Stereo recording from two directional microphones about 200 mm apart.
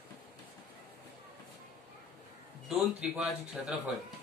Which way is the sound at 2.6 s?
Centre (ahead or behind).